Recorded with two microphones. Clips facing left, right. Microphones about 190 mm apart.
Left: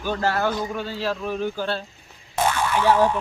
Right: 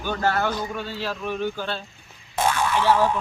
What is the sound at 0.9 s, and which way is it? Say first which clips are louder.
Speech: left 4 dB; 30° left (ahead or behind).